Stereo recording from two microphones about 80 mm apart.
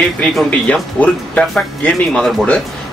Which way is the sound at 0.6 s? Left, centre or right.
Centre.